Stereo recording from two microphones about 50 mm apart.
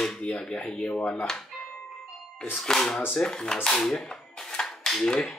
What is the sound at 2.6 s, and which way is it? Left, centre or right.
Speech, centre.